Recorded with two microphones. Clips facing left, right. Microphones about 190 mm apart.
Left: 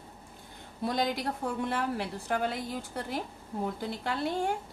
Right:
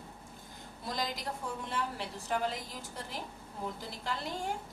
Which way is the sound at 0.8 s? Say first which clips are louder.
Left 7 dB; 65° left (ahead or behind).